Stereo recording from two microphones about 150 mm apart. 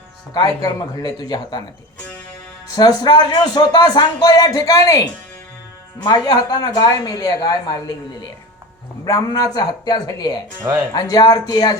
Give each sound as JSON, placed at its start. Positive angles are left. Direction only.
{"t": 0.3, "sound": "speech", "side_deg": 25}
{"t": 2.6, "sound": "speech", "side_deg": 25}
{"t": 9.0, "sound": "speech", "side_deg": 25}